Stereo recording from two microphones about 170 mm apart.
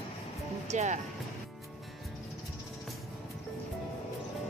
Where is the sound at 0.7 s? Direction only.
45° right (ahead or behind).